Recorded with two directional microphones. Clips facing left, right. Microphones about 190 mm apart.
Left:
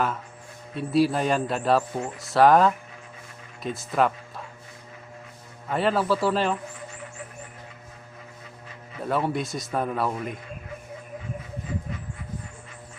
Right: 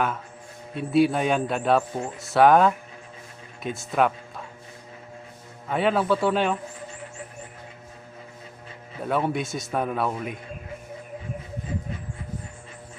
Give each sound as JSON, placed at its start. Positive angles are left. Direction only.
{"t": 0.8, "sound": "speech", "side_deg": 0}
{"t": 5.6, "sound": "speech", "side_deg": 0}
{"t": 9.0, "sound": "speech", "side_deg": 0}